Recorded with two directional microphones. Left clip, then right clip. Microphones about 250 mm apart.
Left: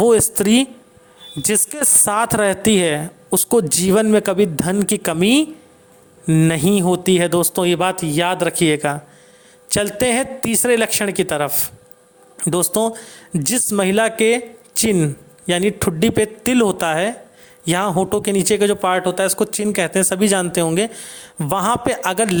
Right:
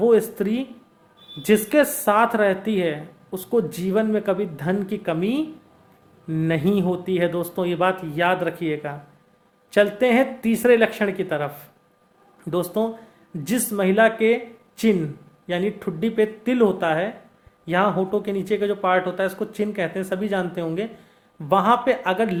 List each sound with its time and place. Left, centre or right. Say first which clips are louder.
0.0 s speech: left 4 dB; left